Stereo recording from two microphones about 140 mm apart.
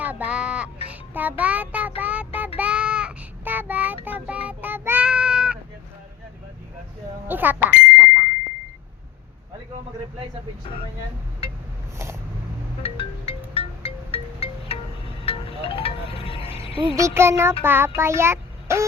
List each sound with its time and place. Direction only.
0.0 s music: 10° right (ahead or behind)
2.0 s child singing: 10° right (ahead or behind)
7.3 s a sound: 15° right (ahead or behind)
7.9 s bicycle bell: 10° right (ahead or behind)
12.8 s music: 40° left (ahead or behind)
16.9 s a child's voice: 20° right (ahead or behind)